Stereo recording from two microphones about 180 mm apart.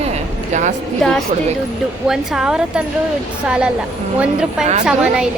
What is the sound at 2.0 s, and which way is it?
Speech, 5° right (ahead or behind).